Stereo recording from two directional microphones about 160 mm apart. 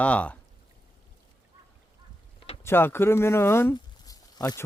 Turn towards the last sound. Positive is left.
turn(degrees=20)  # may be behind; listen again after turning